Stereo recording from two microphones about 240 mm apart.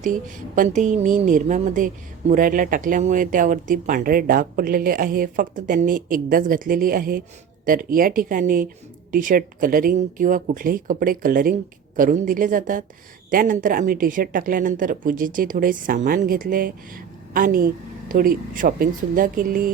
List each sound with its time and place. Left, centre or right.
0.0 s a woman's voice: right